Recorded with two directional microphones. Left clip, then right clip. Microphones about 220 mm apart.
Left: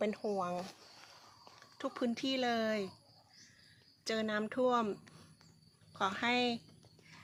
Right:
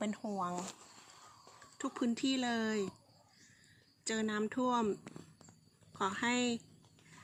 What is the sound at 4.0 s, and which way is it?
Speech, 10° left (ahead or behind).